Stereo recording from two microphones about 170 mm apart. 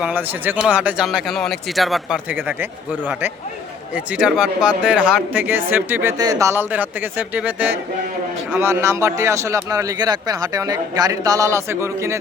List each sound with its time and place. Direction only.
0.0 s speech: 10° right (ahead or behind)